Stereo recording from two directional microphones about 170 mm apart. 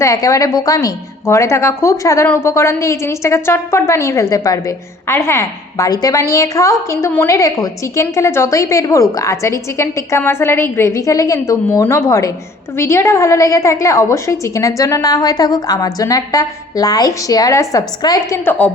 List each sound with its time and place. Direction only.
0.0 s a woman's voice: 20° left (ahead or behind)
18.4 s a woman's voice: 10° left (ahead or behind)